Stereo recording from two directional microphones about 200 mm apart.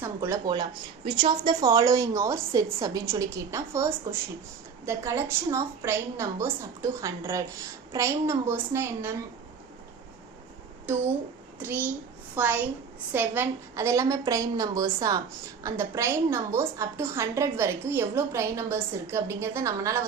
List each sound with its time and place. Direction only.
0.0 s a woman's voice: 15° right (ahead or behind)
11.6 s a woman's voice: 10° right (ahead or behind)